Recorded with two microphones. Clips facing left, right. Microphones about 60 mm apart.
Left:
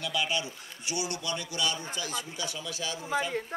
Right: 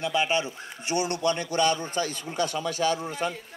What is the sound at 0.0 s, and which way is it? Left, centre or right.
A man's voice, right.